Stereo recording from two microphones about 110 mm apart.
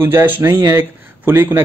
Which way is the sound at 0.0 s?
20° right (ahead or behind).